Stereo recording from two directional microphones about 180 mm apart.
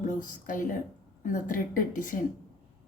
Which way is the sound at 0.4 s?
45° left (ahead or behind).